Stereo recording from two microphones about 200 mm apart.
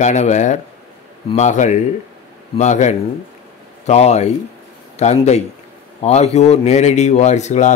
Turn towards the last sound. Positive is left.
turn(degrees=35)  # may be behind; listen again after turning